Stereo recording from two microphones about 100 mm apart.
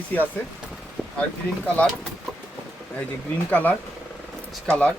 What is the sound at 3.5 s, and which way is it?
Speech, 15° left (ahead or behind).